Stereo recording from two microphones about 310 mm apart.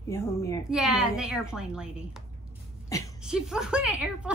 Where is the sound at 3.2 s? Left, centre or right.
Centre.